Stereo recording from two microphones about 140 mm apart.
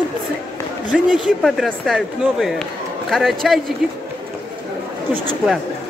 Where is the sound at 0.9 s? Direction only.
5° right (ahead or behind).